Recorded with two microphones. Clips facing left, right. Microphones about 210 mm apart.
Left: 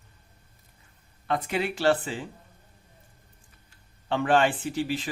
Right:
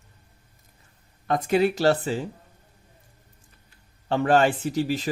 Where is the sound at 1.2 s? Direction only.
45° right (ahead or behind).